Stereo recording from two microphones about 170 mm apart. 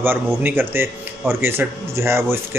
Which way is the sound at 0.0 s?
10° right (ahead or behind).